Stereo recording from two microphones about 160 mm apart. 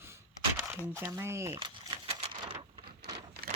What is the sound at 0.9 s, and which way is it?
Speech, 15° right (ahead or behind).